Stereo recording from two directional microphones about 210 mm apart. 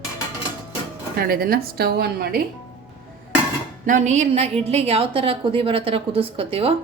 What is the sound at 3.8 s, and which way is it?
A woman's voice, 35° right (ahead or behind).